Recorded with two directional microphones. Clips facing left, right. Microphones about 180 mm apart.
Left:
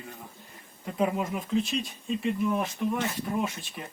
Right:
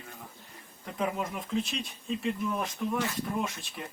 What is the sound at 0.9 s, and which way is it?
Speech, 5° left (ahead or behind).